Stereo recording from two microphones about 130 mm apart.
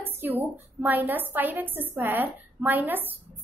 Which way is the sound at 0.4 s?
15° right (ahead or behind).